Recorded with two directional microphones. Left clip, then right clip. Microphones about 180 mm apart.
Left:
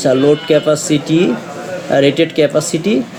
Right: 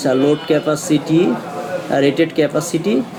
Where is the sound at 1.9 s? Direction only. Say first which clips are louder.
Left 4 dB; 35° left (ahead or behind).